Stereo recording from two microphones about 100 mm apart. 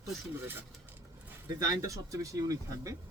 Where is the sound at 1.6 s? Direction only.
35° right (ahead or behind).